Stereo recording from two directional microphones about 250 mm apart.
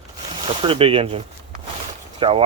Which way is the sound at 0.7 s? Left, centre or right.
Right.